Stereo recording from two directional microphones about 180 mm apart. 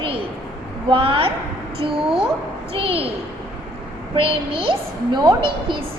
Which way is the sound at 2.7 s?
30° right (ahead or behind).